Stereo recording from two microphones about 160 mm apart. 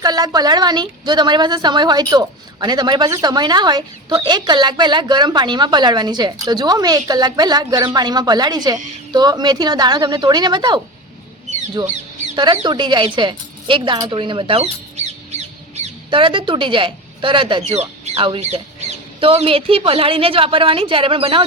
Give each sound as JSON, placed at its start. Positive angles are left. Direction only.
{"t": 0.0, "sound": "a woman's voice", "side_deg": -25}
{"t": 11.8, "sound": "a woman's voice", "side_deg": -30}
{"t": 16.0, "sound": "speech", "side_deg": -30}